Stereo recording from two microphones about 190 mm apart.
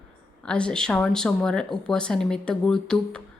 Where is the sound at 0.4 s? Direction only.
5° left (ahead or behind).